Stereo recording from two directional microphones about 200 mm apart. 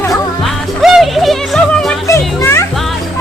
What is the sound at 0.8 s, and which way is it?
Music, centre (ahead or behind).